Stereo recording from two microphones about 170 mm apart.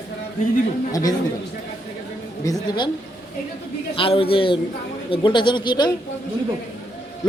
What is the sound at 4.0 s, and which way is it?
A man's voice, 30° left (ahead or behind).